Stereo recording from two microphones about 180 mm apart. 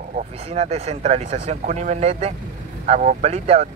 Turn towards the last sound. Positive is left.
turn(degrees=-40)  # may be behind; listen again after turning